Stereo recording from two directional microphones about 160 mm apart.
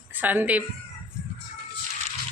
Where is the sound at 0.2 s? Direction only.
10° right (ahead or behind).